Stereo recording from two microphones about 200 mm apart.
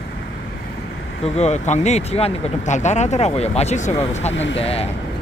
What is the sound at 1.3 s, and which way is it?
Speech, 35° left (ahead or behind).